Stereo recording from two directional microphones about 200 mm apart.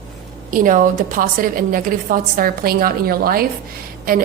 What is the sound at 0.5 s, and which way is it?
A woman's voice, 40° right (ahead or behind).